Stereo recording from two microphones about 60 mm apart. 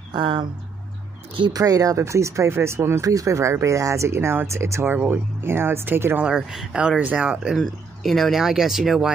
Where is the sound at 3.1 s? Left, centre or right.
Right.